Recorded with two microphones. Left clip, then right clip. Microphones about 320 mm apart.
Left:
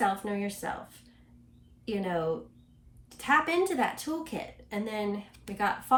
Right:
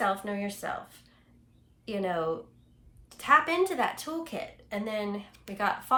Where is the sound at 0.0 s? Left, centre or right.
Centre.